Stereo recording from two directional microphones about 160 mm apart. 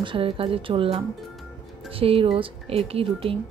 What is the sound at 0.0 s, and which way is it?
Speech, 35° right (ahead or behind).